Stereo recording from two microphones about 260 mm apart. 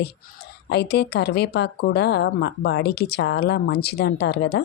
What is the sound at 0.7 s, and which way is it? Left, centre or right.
A woman's voice, left.